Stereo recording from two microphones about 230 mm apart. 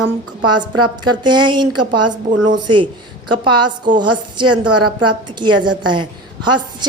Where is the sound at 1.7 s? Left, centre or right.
Right.